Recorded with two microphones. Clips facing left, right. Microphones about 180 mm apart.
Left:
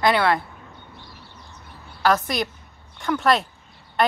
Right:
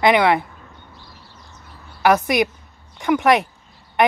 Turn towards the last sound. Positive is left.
turn(degrees=-20)  # may be behind; listen again after turning